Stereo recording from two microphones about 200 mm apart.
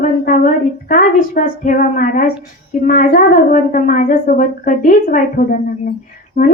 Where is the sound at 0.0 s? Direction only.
40° left (ahead or behind).